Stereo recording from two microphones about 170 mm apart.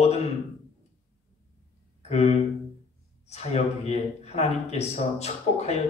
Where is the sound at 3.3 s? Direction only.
40° left (ahead or behind).